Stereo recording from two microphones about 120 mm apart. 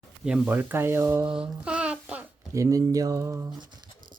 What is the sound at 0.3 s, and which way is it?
Speech, 10° right (ahead or behind).